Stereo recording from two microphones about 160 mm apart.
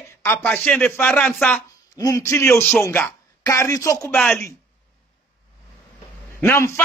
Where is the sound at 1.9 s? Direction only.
20° left (ahead or behind).